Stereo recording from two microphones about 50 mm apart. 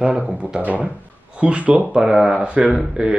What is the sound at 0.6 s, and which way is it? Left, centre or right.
Speech, right.